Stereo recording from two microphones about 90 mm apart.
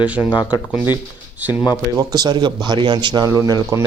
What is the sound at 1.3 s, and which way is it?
Speech, 20° right (ahead or behind).